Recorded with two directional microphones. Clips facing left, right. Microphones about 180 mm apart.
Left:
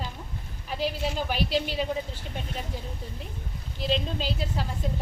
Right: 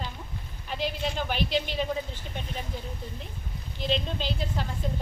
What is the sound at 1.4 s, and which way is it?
Speech, 40° left (ahead or behind).